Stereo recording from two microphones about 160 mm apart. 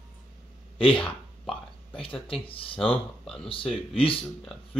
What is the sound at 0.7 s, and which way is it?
Speech, 35° left (ahead or behind).